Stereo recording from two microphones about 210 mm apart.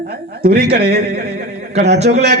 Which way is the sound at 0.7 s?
30° right (ahead or behind).